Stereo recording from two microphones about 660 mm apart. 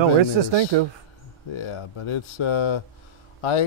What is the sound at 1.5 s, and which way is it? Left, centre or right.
Speech, left.